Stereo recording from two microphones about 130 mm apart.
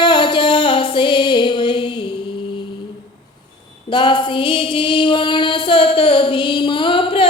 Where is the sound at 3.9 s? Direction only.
40° left (ahead or behind).